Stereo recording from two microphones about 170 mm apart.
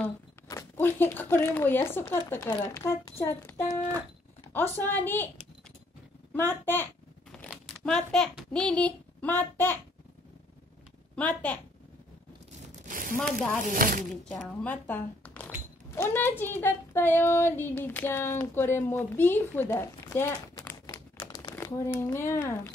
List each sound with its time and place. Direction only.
0.5 s speech: 15° left (ahead or behind)
6.3 s a child's voice: 10° left (ahead or behind)
11.1 s speech: 10° left (ahead or behind)
12.8 s a sound: 55° right (ahead or behind)
13.6 s speech: 55° right (ahead or behind)
14.3 s speech: 10° left (ahead or behind)
20.8 s crumpling: 25° left (ahead or behind)
22.1 s speech: 15° left (ahead or behind)